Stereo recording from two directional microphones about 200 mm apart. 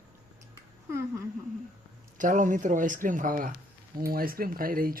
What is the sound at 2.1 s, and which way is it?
Speech, 40° right (ahead or behind).